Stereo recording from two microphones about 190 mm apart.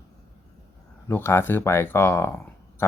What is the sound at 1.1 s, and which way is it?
Speech, 10° left (ahead or behind).